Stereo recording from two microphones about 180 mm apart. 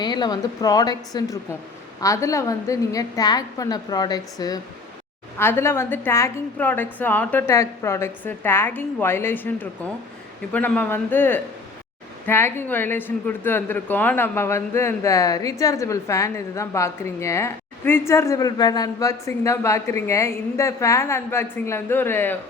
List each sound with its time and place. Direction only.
0.0 s a woman's voice: 25° left (ahead or behind)